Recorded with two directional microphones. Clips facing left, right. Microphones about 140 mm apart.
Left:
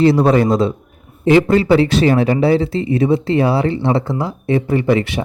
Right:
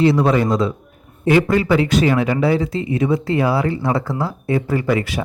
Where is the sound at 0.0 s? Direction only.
35° left (ahead or behind).